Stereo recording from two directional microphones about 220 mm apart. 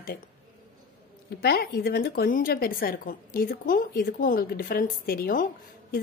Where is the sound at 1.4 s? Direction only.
45° left (ahead or behind).